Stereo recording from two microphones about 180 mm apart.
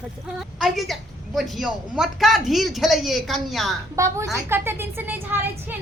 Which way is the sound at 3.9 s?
15° right (ahead or behind).